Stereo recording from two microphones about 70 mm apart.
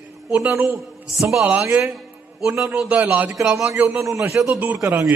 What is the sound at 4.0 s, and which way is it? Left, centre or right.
Speech, right.